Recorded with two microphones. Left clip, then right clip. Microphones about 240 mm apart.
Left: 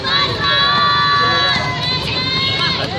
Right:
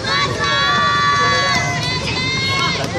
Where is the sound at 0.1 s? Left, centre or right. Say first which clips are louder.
Left 2 dB; right.